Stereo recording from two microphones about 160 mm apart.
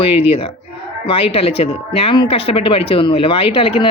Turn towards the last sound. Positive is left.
turn(degrees=35)  # may be behind; listen again after turning